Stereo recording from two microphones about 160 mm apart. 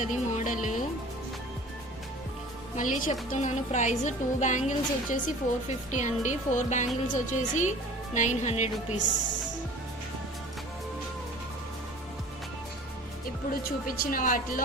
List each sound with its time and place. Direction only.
0.0 s speech: 50° left (ahead or behind)
0.6 s music: 55° left (ahead or behind)
2.7 s a woman's voice: 55° left (ahead or behind)
13.5 s speech: 60° left (ahead or behind)